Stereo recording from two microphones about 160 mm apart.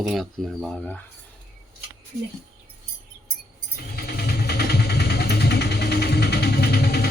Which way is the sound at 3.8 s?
70° left (ahead or behind).